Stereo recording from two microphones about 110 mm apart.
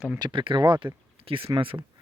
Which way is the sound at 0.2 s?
50° right (ahead or behind).